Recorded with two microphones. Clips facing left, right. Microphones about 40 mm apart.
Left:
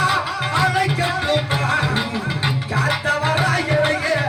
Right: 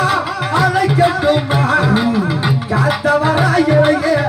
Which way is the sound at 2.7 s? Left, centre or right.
Centre.